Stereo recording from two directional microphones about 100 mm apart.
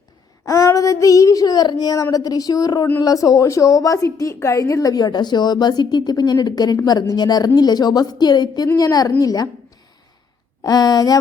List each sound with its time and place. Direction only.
0.4 s child singing: 35° left (ahead or behind)
2.1 s a woman's voice: 40° left (ahead or behind)
10.6 s a woman's voice: 40° left (ahead or behind)